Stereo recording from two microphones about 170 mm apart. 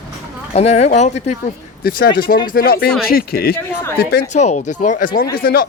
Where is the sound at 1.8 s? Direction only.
60° left (ahead or behind).